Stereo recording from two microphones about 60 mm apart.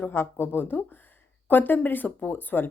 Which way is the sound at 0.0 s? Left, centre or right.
Left.